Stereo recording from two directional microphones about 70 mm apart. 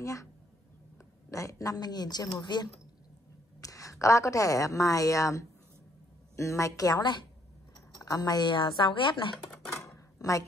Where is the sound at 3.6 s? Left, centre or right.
Left.